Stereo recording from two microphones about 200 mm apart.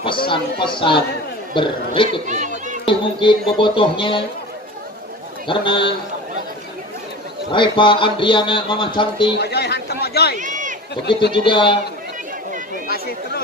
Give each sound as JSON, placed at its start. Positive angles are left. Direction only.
{"t": 0.3, "sound": "speech", "side_deg": 25}
{"t": 2.0, "sound": "speech", "side_deg": -40}
{"t": 2.8, "sound": "speech", "side_deg": 25}
{"t": 5.5, "sound": "speech", "side_deg": 25}
{"t": 7.5, "sound": "speech", "side_deg": 25}
{"t": 9.4, "sound": "speech", "side_deg": 55}
{"t": 10.4, "sound": "a sound", "side_deg": -40}
{"t": 11.1, "sound": "speech", "side_deg": 55}
{"t": 11.3, "sound": "speech", "side_deg": 25}